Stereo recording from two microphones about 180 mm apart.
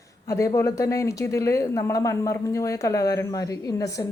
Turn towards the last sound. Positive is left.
turn(degrees=20)  # may be behind; listen again after turning